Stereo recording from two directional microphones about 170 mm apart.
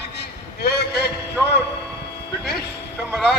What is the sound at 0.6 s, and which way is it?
Speech, 70° left (ahead or behind).